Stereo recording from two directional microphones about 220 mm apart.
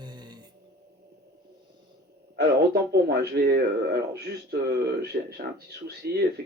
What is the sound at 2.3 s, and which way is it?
A man's voice, 45° right (ahead or behind).